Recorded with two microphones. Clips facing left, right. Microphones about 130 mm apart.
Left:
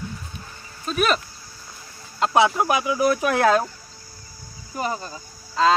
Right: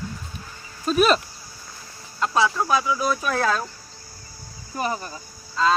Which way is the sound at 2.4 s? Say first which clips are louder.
Left 3 dB; 15° left (ahead or behind).